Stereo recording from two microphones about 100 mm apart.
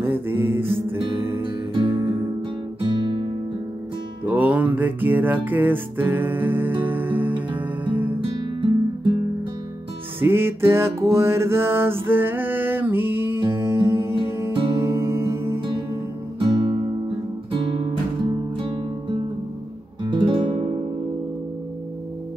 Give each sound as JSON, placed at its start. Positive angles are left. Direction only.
{"t": 0.0, "sound": "music", "side_deg": -20}
{"t": 1.4, "sound": "music", "side_deg": -60}
{"t": 4.3, "sound": "music", "side_deg": -15}
{"t": 8.2, "sound": "music", "side_deg": -60}
{"t": 10.2, "sound": "music", "side_deg": -25}
{"t": 14.5, "sound": "music", "side_deg": -65}
{"t": 14.8, "sound": "music", "side_deg": -25}
{"t": 16.3, "sound": "music", "side_deg": -60}
{"t": 17.5, "sound": "guitar", "side_deg": -65}
{"t": 20.0, "sound": "music", "side_deg": -50}